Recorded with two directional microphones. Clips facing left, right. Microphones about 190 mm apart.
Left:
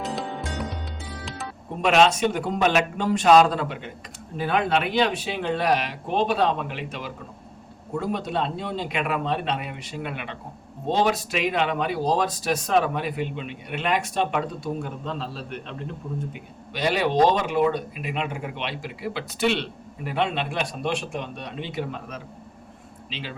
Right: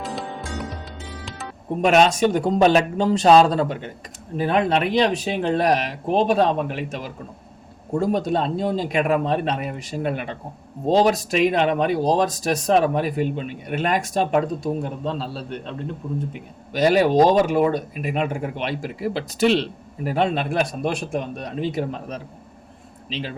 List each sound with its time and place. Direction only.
0.0 s music: centre (ahead or behind)
1.8 s speech: 45° right (ahead or behind)
16.7 s speech: 45° right (ahead or behind)